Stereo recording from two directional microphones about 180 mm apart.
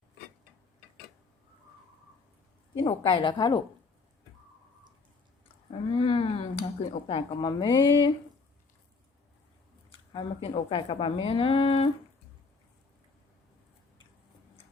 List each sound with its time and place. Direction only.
2.8 s a woman's voice: 25° left (ahead or behind)
5.7 s a sound: 30° left (ahead or behind)
9.9 s speech: 30° left (ahead or behind)